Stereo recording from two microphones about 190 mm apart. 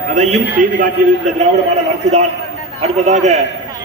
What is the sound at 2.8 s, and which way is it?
Speech, 35° right (ahead or behind).